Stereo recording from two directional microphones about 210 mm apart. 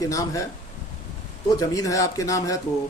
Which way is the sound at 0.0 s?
15° left (ahead or behind).